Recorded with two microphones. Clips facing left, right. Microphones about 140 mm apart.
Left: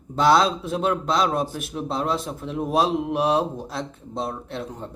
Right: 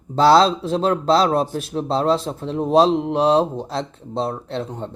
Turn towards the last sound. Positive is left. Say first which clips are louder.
# right 5 dB
turn(degrees=-30)  # may be behind; listen again after turning